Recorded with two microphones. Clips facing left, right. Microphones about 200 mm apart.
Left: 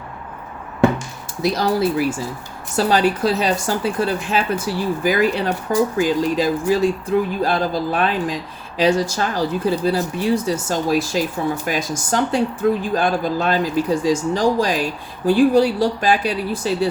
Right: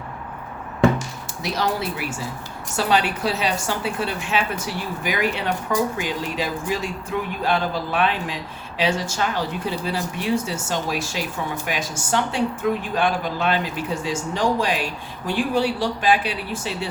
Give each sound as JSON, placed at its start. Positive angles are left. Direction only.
{"t": 1.4, "sound": "speech", "side_deg": 35}